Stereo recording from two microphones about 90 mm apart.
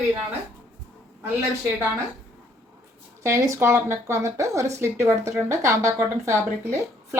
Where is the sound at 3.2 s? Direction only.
35° right (ahead or behind).